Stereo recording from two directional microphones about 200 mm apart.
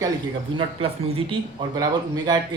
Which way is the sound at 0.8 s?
30° right (ahead or behind).